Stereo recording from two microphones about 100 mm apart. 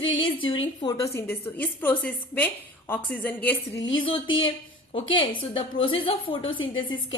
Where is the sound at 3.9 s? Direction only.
60° left (ahead or behind).